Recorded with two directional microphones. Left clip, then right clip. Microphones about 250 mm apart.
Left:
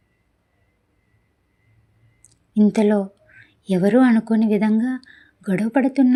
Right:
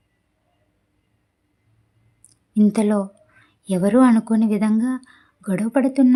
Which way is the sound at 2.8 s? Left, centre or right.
Centre.